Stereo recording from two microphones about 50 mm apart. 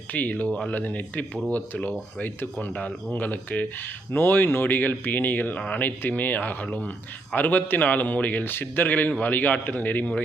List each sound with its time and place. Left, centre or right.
0.1 s speech: left
0.7 s speech: left
5.5 s speech: left